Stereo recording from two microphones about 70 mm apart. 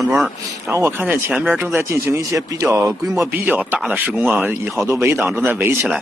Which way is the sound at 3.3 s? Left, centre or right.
Right.